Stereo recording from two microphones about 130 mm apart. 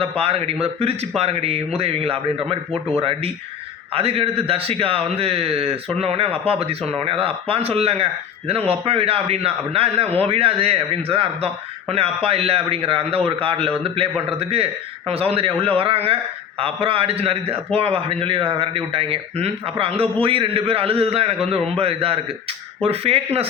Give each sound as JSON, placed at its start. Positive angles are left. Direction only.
{"t": 0.0, "sound": "a man's voice", "side_deg": -50}